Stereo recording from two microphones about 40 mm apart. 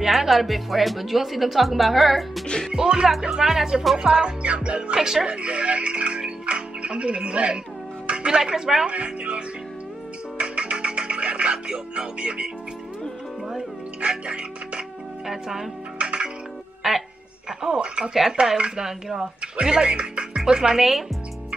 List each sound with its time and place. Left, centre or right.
0.0 s a woman's voice: centre
2.7 s speech: centre
4.1 s speech: right
4.9 s speech: centre
5.3 s speech: right
8.1 s music: right
8.4 s speech: centre
8.8 s speech: right
10.3 s music: right
13.6 s speech: right
15.2 s speech: centre
16.0 s music: right
16.8 s speech: centre
19.4 s speech: right